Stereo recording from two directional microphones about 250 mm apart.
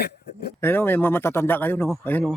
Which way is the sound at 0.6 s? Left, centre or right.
Centre.